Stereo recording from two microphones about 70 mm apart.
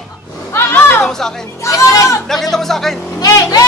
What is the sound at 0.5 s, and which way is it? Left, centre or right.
Speech, left.